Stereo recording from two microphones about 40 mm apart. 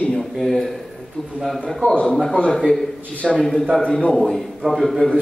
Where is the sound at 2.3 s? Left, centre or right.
Left.